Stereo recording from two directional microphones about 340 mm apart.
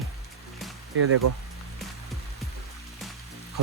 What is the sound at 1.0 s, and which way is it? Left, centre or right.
Speech, right.